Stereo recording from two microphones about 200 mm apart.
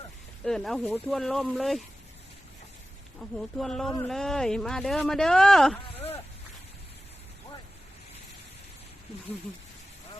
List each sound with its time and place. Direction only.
0.4 s speech: centre (ahead or behind)
3.2 s speech: centre (ahead or behind)
5.9 s a sound: 30° left (ahead or behind)